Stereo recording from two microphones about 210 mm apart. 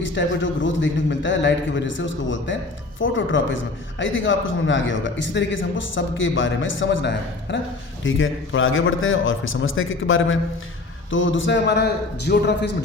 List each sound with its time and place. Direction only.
0.0 s a man's voice: 60° left (ahead or behind)